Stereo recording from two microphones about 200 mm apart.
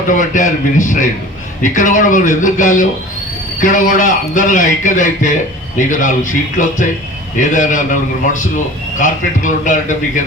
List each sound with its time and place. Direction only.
0.1 s a man's voice: 40° left (ahead or behind)